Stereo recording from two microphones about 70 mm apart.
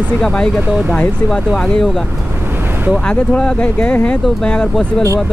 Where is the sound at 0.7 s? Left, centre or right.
Centre.